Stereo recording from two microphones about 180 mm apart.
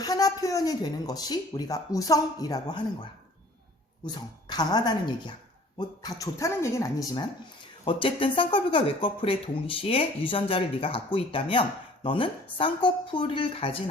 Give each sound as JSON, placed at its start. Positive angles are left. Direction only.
{"t": 0.0, "sound": "speech", "side_deg": 20}
{"t": 4.1, "sound": "speech", "side_deg": 25}